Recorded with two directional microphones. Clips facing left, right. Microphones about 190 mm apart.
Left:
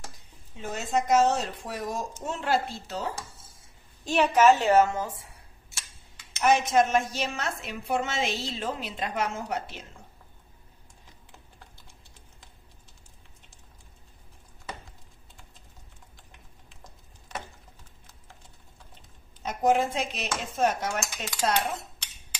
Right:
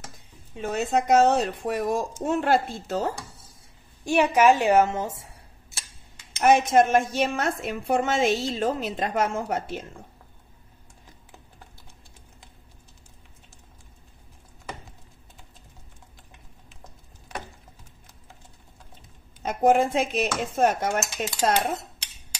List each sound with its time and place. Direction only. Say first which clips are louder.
0.6 s a woman's voice: right 4 dB; 60° right (ahead or behind)
4.0 s a woman's voice: right 2 dB; 10° right (ahead or behind)
6.4 s a woman's voice: right 4 dB; 55° right (ahead or behind)
19.4 s a woman's voice: right 4 dB; 50° right (ahead or behind)